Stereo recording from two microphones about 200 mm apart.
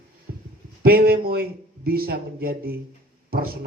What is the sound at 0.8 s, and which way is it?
Speech, 50° right (ahead or behind).